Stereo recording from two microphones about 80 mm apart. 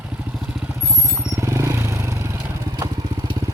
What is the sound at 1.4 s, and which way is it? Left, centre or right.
Vehicle, right.